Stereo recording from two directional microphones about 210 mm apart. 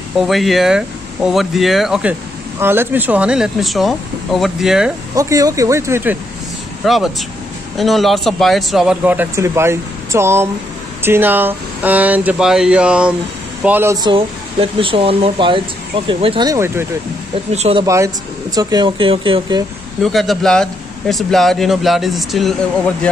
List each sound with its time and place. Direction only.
0.2 s speech: centre (ahead or behind)
5.1 s speech: 15° right (ahead or behind)
6.8 s speech: centre (ahead or behind)
17.5 s speech: 30° right (ahead or behind)
17.8 s speech: 15° right (ahead or behind)
20.0 s speech: centre (ahead or behind)